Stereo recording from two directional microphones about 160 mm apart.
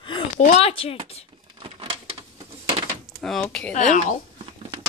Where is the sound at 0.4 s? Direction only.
40° left (ahead or behind).